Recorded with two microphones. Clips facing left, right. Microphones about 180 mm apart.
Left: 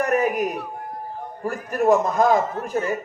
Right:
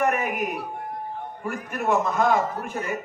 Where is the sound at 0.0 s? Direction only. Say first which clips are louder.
Left 4 dB; 35° left (ahead or behind).